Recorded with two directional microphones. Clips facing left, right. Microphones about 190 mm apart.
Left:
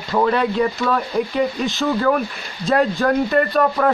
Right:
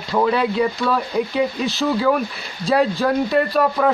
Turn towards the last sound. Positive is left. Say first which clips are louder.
# left 1 dB
turn(degrees=-5)  # may be behind; listen again after turning